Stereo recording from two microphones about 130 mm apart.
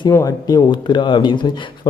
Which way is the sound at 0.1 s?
30° left (ahead or behind).